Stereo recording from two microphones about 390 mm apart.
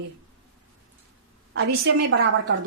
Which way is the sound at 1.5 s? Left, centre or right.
Right.